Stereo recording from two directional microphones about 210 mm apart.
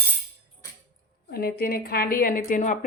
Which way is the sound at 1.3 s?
45° left (ahead or behind).